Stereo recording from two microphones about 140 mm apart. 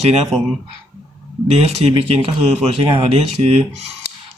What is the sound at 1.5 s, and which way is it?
Speech, 45° right (ahead or behind).